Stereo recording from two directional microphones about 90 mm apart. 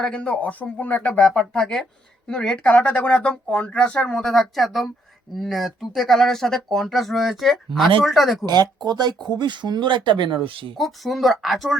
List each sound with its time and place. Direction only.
0.0 s speech: 10° left (ahead or behind)
8.4 s speech: 50° right (ahead or behind); by 10.8 s 75° right (ahead or behind)
10.8 s speech: centre (ahead or behind)